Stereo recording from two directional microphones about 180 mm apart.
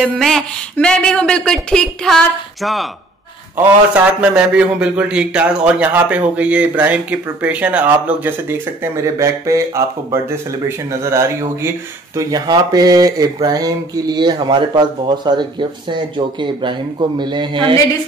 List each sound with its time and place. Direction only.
0.0 s a man's voice: centre (ahead or behind); by 17.7 s 25° right (ahead or behind)